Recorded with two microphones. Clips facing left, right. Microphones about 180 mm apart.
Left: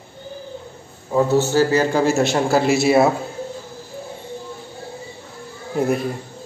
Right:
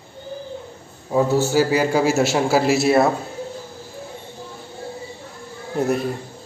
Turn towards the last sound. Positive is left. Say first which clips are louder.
# left 1 dB
turn(degrees=0)  # may be behind; listen again after turning